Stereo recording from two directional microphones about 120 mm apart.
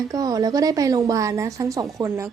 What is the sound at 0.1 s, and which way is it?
Speech, 30° right (ahead or behind).